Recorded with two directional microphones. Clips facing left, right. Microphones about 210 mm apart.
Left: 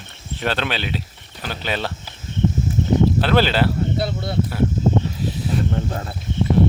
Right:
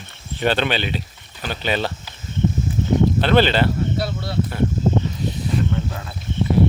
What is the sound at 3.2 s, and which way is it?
Speech, 5° left (ahead or behind).